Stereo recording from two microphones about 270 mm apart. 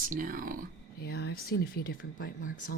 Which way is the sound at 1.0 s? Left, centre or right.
Left.